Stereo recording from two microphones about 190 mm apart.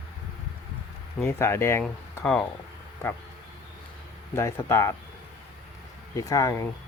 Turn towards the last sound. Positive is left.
turn(degrees=15)  # may be behind; listen again after turning